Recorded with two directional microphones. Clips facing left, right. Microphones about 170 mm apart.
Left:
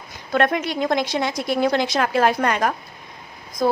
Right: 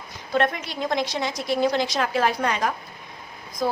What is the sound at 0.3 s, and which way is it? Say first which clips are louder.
A woman's voice: left 4 dB; 60° left (ahead or behind).